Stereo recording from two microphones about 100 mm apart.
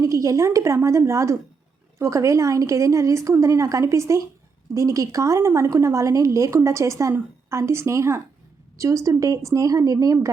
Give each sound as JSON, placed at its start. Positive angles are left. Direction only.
{"t": 0.0, "sound": "a woman's voice", "side_deg": -35}